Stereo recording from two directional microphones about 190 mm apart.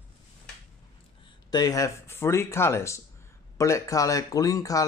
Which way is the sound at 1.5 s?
20° left (ahead or behind).